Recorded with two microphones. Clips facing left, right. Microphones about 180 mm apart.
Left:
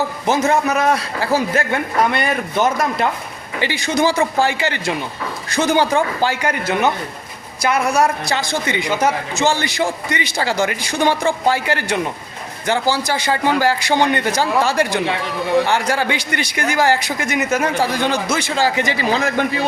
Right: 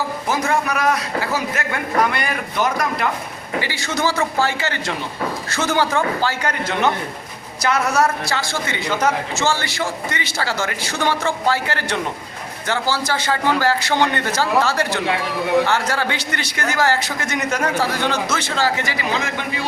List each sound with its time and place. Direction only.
0.3 s a man's voice: 25° left (ahead or behind)
15.0 s a man's voice: centre (ahead or behind)
15.6 s a man's voice: 15° left (ahead or behind)
18.9 s a man's voice: 35° left (ahead or behind)